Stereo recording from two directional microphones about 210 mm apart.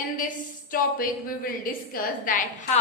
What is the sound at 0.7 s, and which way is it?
A woman's voice, 40° left (ahead or behind).